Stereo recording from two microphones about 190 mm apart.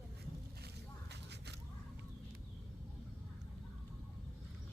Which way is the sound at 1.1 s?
60° right (ahead or behind).